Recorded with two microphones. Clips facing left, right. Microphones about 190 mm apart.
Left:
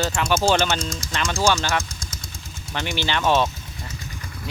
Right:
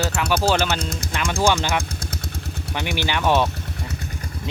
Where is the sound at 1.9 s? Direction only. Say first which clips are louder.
Right 7 dB; 60° right (ahead or behind).